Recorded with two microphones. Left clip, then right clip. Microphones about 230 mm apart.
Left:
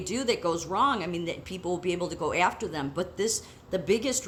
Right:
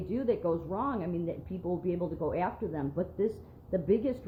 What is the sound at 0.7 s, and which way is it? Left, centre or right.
Speech, centre.